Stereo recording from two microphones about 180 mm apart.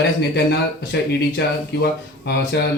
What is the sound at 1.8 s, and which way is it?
Speech, 65° left (ahead or behind).